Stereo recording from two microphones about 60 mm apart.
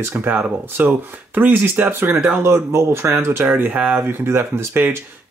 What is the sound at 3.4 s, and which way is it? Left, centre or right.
Speech, right.